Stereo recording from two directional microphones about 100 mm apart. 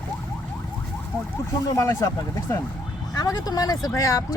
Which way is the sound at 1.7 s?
30° left (ahead or behind).